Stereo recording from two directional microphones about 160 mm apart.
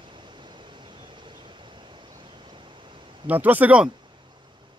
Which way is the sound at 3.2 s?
10° right (ahead or behind).